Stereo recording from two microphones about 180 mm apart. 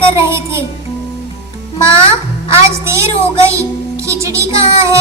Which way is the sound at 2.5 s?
15° right (ahead or behind).